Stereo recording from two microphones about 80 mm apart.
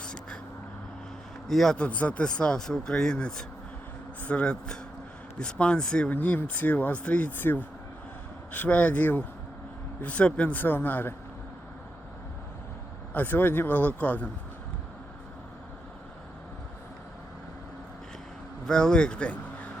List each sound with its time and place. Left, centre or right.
0.0 s a sound: centre
1.5 s speech: centre
6.1 s speech: left
13.1 s speech: left
18.6 s speech: centre